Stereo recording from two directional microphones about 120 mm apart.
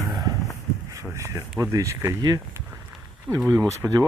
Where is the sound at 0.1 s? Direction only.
30° right (ahead or behind).